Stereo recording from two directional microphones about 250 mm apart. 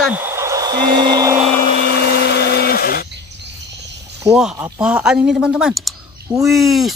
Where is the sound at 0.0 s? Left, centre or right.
Centre.